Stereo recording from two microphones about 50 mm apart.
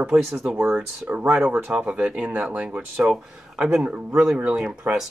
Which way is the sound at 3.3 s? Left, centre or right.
Centre.